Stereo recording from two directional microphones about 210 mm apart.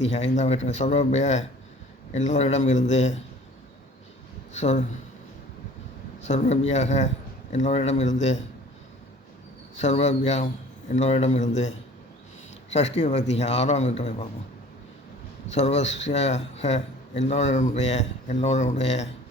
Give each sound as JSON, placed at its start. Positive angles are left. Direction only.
{"t": 0.1, "sound": "a man's voice", "side_deg": 30}
{"t": 4.5, "sound": "a man's voice", "side_deg": 35}
{"t": 6.2, "sound": "a man's voice", "side_deg": 35}
{"t": 9.7, "sound": "a man's voice", "side_deg": 30}
{"t": 13.0, "sound": "a man's voice", "side_deg": 35}
{"t": 15.5, "sound": "a man's voice", "side_deg": 30}